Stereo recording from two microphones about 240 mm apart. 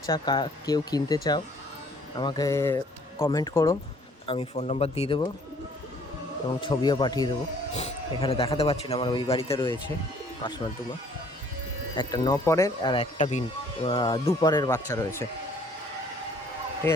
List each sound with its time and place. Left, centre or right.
0.0 s speech: centre
4.3 s a man's voice: left
6.6 s a man's voice: centre
11.9 s a man's voice: centre
16.8 s speech: centre